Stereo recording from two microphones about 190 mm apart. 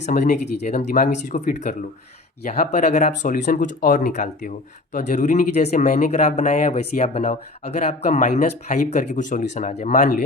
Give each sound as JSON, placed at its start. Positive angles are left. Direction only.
{"t": 0.0, "sound": "speech", "side_deg": 45}